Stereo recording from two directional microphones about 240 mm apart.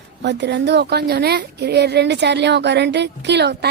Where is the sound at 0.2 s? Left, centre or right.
Right.